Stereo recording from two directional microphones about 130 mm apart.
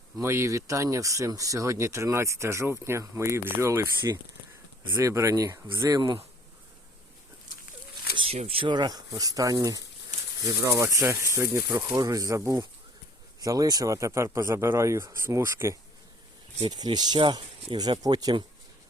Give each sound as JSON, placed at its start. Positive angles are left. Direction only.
{"t": 0.2, "sound": "speech", "side_deg": -20}
{"t": 4.9, "sound": "speech", "side_deg": -25}
{"t": 8.1, "sound": "speech", "side_deg": -45}
{"t": 16.6, "sound": "speech", "side_deg": -35}